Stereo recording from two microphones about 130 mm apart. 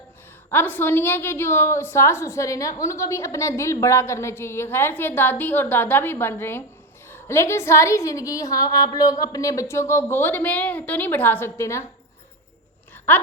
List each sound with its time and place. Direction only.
0.5 s a woman's voice: 15° left (ahead or behind)
13.1 s speech: 15° left (ahead or behind)